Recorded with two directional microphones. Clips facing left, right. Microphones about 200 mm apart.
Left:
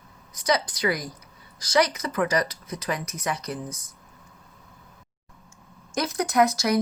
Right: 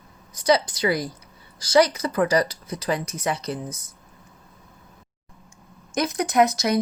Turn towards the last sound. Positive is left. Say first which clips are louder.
# right 2 dB
turn(degrees=-20)  # may be behind; listen again after turning